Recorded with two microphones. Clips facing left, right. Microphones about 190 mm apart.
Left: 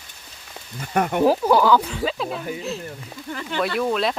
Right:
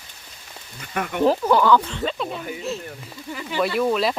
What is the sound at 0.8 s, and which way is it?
Speech, 45° left (ahead or behind).